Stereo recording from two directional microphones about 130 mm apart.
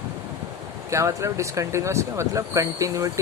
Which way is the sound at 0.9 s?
25° right (ahead or behind).